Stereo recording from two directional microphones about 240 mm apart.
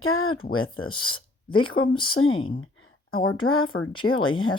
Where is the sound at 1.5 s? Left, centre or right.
Left.